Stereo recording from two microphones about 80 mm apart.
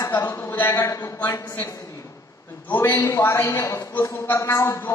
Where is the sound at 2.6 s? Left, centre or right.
Left.